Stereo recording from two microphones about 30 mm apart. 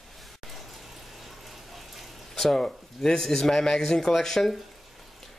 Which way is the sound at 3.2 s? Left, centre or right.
Centre.